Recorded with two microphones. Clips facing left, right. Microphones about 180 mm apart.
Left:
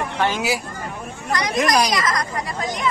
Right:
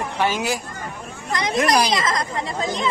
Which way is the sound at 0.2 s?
5° right (ahead or behind).